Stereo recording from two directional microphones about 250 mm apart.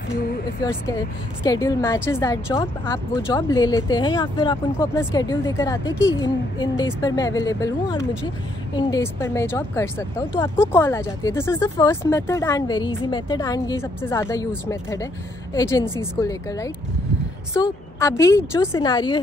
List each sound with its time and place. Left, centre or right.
0.7 s speech: centre